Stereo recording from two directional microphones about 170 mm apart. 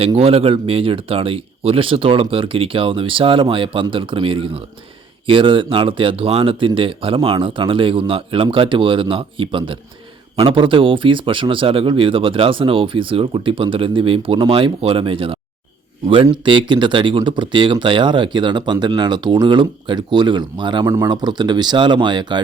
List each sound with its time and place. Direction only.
0.2 s speech: 35° right (ahead or behind)